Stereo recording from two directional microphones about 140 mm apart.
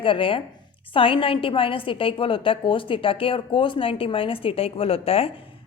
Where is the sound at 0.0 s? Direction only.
40° left (ahead or behind).